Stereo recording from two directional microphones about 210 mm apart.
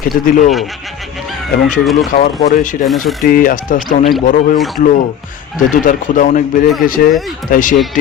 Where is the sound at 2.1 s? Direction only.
35° left (ahead or behind).